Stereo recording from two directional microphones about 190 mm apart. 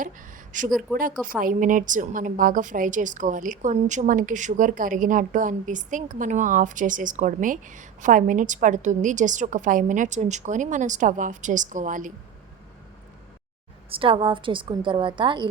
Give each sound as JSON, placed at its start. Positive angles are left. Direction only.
{"t": 0.7, "sound": "speech", "side_deg": 0}
{"t": 1.2, "sound": "a woman's voice", "side_deg": -45}
{"t": 13.9, "sound": "a woman's voice", "side_deg": -30}